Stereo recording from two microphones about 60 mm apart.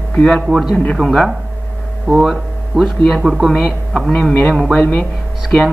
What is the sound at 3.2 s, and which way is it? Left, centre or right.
Speech, centre.